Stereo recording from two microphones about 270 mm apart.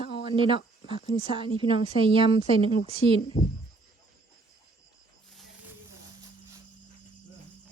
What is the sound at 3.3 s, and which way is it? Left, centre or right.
Speech, centre.